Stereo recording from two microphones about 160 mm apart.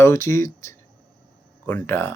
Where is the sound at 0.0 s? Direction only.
15° left (ahead or behind).